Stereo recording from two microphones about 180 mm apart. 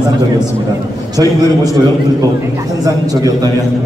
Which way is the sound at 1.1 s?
20° right (ahead or behind).